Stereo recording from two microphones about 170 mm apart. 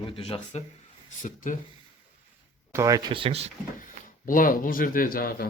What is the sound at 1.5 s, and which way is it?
Speech, 50° left (ahead or behind).